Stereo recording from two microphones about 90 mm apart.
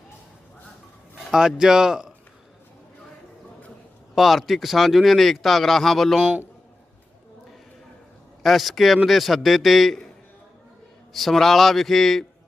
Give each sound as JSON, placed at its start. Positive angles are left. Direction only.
{"t": 1.3, "sound": "speech", "side_deg": -5}
{"t": 4.1, "sound": "speech", "side_deg": 0}
{"t": 8.4, "sound": "speech", "side_deg": 0}
{"t": 11.1, "sound": "speech", "side_deg": 0}